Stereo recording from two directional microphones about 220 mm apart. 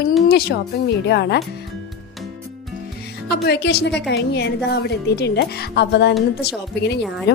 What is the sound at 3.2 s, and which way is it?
A woman's voice, 50° left (ahead or behind).